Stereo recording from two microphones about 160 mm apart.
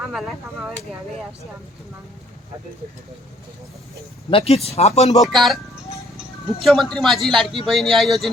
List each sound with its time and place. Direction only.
0.0 s a man's voice: centre (ahead or behind)
4.3 s speech: 35° left (ahead or behind)
5.2 s a man's voice: centre (ahead or behind)
6.6 s a man's voice: centre (ahead or behind)